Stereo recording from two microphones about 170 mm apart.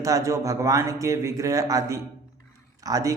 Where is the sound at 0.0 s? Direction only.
20° right (ahead or behind).